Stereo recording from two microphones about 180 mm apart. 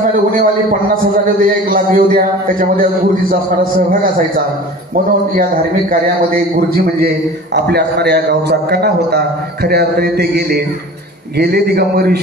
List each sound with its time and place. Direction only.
0.1 s a man's voice: 50° right (ahead or behind)
7.5 s a man's voice: 65° right (ahead or behind)